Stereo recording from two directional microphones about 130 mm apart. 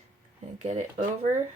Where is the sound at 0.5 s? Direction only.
65° right (ahead or behind).